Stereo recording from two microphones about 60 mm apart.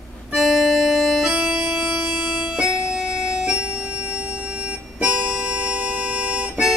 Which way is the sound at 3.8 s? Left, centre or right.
Right.